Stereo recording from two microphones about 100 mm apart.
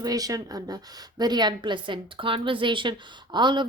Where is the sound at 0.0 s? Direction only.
40° right (ahead or behind).